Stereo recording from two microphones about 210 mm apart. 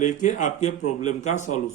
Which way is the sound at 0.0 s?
35° left (ahead or behind).